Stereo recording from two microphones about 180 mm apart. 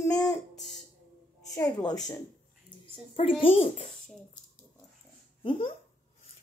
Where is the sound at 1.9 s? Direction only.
20° left (ahead or behind).